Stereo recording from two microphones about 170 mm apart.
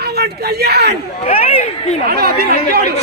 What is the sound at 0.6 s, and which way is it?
Chatter, 70° right (ahead or behind).